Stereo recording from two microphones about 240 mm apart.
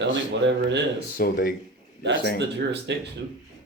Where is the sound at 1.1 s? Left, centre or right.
Left.